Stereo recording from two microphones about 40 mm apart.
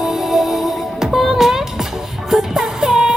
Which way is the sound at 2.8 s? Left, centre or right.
Centre.